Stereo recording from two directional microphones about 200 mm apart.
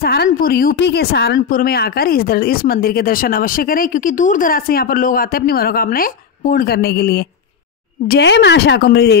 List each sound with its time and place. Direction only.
0.0 s a woman's voice: 50° left (ahead or behind)